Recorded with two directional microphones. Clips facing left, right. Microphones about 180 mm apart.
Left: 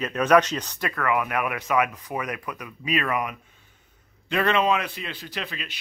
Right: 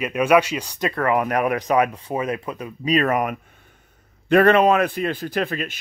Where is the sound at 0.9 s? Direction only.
35° right (ahead or behind).